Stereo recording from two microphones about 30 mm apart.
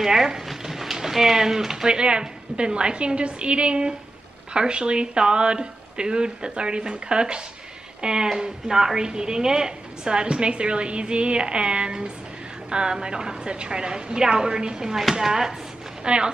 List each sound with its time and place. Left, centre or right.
0.0 s speech: centre
1.9 s a woman's voice: right
10.2 s a woman's voice: right
15.2 s speech: centre
16.0 s a woman's voice: right